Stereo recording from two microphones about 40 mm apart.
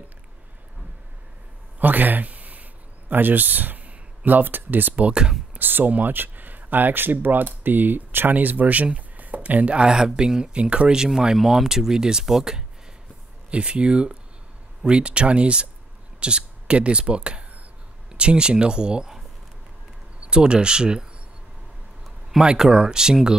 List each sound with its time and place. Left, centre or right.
1.8 s a sound: right
3.1 s speech: right
9.9 s speech: centre
13.5 s speech: right
20.2 s speech: right
22.6 s speech: centre